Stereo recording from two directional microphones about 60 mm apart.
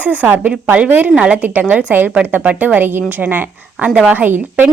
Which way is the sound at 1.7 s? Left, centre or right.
Right.